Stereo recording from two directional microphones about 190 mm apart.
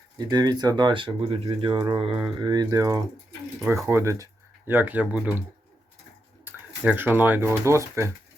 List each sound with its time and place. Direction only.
0.2 s speech: 20° right (ahead or behind)
6.4 s speech: 10° right (ahead or behind)